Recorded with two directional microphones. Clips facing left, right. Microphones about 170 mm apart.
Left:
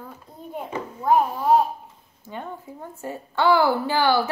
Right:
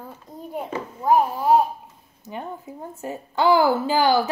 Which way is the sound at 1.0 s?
5° right (ahead or behind).